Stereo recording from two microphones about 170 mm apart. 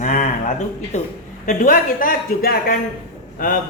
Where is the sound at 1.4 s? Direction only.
55° left (ahead or behind).